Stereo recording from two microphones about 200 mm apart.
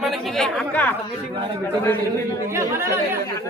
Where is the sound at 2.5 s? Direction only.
15° right (ahead or behind).